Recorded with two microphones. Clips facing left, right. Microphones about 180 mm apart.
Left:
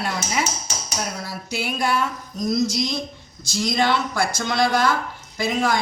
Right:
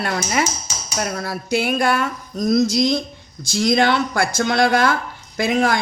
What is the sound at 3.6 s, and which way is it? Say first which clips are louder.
Speech: right 4 dB; 60° right (ahead or behind).